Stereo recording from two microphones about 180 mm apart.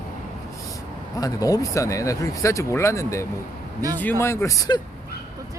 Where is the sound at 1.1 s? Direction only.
20° left (ahead or behind).